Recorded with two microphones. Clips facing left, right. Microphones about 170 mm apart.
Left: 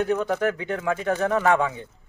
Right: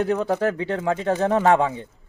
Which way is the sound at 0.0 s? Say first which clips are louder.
Right 2 dB; 30° right (ahead or behind).